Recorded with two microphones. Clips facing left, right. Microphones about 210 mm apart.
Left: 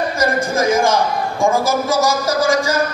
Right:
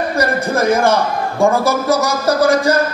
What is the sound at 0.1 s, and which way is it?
A man's voice, 60° right (ahead or behind).